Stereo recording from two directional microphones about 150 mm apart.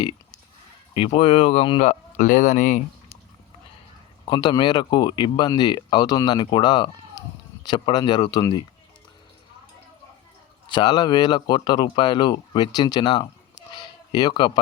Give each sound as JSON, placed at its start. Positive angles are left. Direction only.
{"t": 0.9, "sound": "speech", "side_deg": 40}
{"t": 1.8, "sound": "speech", "side_deg": 55}
{"t": 4.3, "sound": "speech", "side_deg": 30}
{"t": 10.7, "sound": "speech", "side_deg": 30}
{"t": 13.7, "sound": "a sound", "side_deg": 30}